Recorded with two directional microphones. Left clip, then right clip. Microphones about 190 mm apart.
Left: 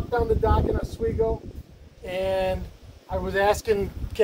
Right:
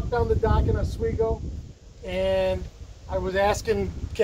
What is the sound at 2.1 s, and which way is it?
Speech, 15° left (ahead or behind).